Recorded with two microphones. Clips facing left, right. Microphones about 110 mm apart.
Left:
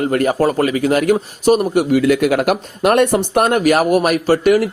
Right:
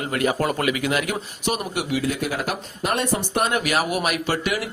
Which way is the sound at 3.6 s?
45° left (ahead or behind).